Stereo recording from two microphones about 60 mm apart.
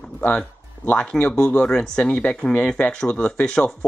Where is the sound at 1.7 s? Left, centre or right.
Centre.